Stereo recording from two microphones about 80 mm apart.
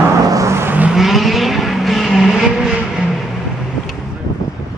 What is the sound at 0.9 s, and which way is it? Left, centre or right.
Vehicle, centre.